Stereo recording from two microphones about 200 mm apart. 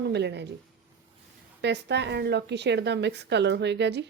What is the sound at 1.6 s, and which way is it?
Speech, 60° right (ahead or behind).